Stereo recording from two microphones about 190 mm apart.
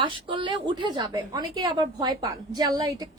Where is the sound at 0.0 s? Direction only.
25° right (ahead or behind).